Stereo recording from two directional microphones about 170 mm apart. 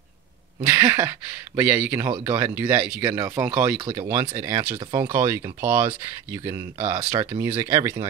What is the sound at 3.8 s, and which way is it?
Speech, 20° right (ahead or behind).